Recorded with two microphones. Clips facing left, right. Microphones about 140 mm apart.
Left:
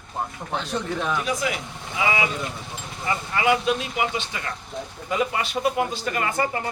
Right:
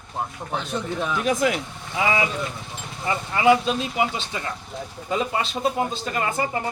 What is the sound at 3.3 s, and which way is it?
Speech, 25° right (ahead or behind).